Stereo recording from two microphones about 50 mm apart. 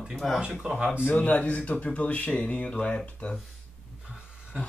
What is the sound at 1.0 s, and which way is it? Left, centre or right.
Speech, left.